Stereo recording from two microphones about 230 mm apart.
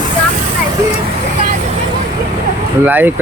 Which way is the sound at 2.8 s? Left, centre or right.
Centre.